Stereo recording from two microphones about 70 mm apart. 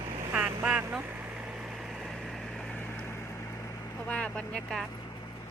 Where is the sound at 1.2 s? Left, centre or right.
Centre.